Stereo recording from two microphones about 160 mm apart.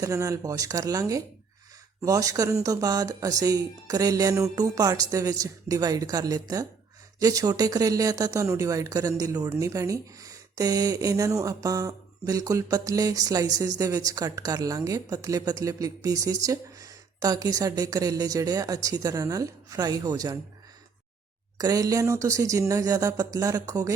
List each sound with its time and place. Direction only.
0.0 s speech: 20° right (ahead or behind)
21.6 s speech: 25° right (ahead or behind)